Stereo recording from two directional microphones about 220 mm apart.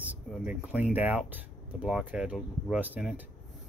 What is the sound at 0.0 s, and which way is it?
Speech, 5° right (ahead or behind).